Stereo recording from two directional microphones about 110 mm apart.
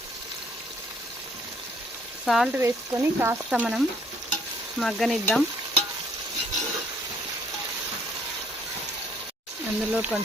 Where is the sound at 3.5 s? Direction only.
5° right (ahead or behind).